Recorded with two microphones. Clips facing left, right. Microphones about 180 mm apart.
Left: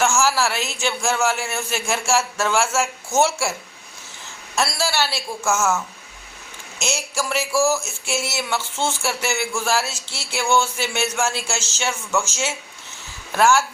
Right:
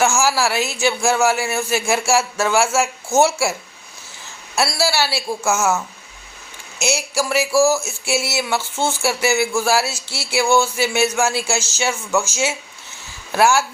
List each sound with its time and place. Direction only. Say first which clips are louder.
0.0 s a man's voice: right 2 dB; 10° right (ahead or behind)
4.5 s a man's voice: right 3 dB; 10° right (ahead or behind)
6.7 s a man's voice: right 5 dB; 10° right (ahead or behind)
7.5 s a sound: right 4 dB; 40° right (ahead or behind)
7.9 s a man's voice: right 4 dB; 10° right (ahead or behind)